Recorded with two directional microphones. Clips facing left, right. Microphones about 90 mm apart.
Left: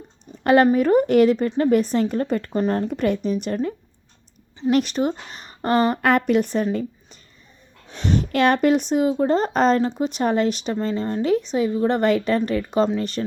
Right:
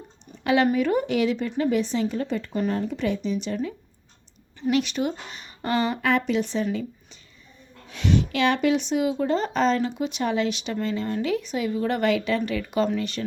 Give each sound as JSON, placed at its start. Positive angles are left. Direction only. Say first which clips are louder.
{"t": 0.4, "sound": "speech", "louder": "left 5 dB", "side_deg": 45}
{"t": 7.9, "sound": "a woman's voice", "louder": "even", "side_deg": 35}